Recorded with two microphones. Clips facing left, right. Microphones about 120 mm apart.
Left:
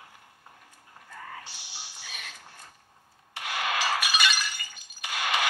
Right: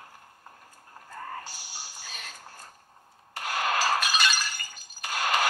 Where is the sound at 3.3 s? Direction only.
40° right (ahead or behind).